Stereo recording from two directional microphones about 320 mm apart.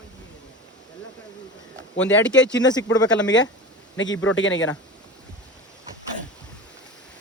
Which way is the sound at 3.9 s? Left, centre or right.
Left.